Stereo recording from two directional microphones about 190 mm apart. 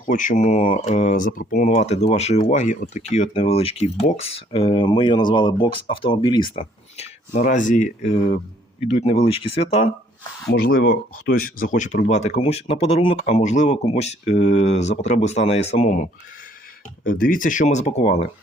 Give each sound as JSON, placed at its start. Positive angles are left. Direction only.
{"t": 0.0, "sound": "speech", "side_deg": 40}
{"t": 10.5, "sound": "speech", "side_deg": 50}
{"t": 17.0, "sound": "speech", "side_deg": 50}